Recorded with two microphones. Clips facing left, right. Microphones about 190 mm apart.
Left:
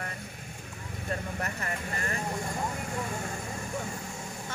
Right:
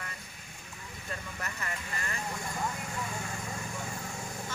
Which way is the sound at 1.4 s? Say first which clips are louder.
Left 5 dB; 45° left (ahead or behind).